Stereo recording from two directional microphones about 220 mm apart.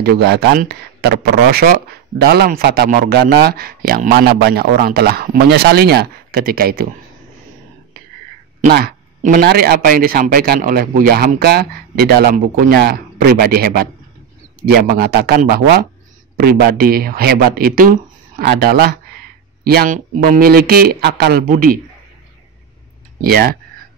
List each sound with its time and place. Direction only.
0.0 s speech: 45° right (ahead or behind)
8.5 s speech: 45° right (ahead or behind)
23.2 s speech: 45° right (ahead or behind)